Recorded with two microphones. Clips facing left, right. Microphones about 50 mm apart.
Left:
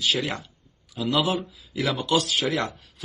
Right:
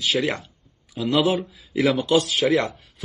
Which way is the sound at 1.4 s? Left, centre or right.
Centre.